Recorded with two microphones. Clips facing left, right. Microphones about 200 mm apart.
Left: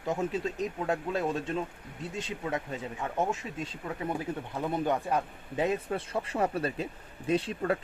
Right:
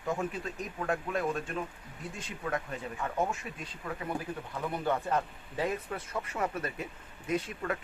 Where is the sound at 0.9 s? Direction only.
25° left (ahead or behind).